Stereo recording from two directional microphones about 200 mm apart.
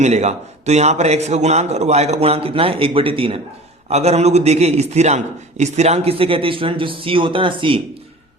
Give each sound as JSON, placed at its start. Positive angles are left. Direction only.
{"t": 0.0, "sound": "a man's voice", "side_deg": -35}